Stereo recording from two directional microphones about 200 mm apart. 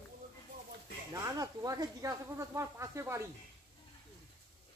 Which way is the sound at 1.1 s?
15° right (ahead or behind).